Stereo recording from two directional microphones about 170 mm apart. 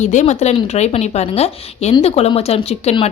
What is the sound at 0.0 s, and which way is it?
Speech, 45° left (ahead or behind).